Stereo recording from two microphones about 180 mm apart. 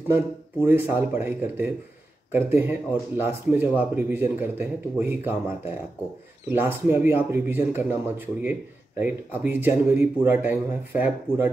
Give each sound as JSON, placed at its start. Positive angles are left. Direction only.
{"t": 0.1, "sound": "speech", "side_deg": -10}
{"t": 6.5, "sound": "speech", "side_deg": -10}